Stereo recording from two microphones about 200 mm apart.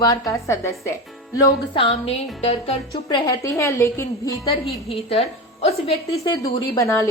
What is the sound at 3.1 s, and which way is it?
A woman's voice, 15° left (ahead or behind).